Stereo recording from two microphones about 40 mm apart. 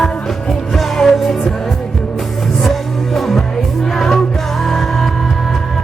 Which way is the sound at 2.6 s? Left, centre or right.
Centre.